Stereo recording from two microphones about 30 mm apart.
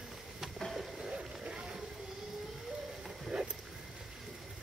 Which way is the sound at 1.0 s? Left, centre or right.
Right.